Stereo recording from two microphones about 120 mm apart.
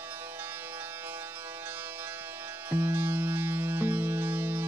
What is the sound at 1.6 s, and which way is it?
Music, 15° right (ahead or behind).